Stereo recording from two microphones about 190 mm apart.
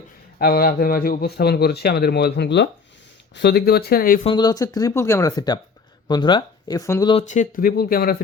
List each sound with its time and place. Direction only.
0.3 s speech: 55° left (ahead or behind)
4.2 s speech: 25° left (ahead or behind)
7.1 s speech: 35° left (ahead or behind); by 8.1 s 50° left (ahead or behind)